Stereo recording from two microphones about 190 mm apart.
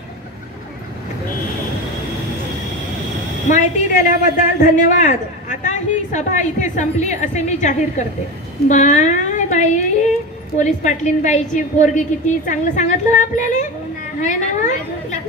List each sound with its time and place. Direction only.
3.4 s a woman's voice: 40° left (ahead or behind)